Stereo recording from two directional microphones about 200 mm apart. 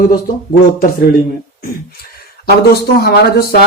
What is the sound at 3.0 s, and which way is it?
Speech, 55° left (ahead or behind).